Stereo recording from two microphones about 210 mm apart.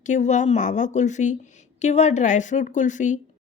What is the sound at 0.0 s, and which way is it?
A woman's voice, 35° left (ahead or behind).